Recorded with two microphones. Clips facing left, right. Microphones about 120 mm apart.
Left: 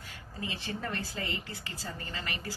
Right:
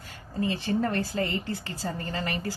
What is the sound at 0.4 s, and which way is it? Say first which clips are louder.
Speech: right 11 dB; 45° right (ahead or behind).